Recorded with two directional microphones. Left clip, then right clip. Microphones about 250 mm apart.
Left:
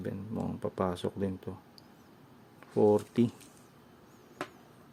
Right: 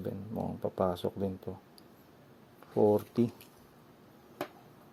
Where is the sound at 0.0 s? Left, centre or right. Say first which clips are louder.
Even; centre.